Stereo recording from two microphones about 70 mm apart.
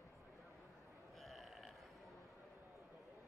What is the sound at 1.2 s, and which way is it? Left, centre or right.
Livestock, centre.